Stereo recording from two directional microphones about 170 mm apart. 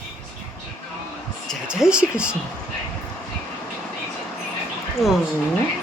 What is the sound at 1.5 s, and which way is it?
Speech, 5° right (ahead or behind).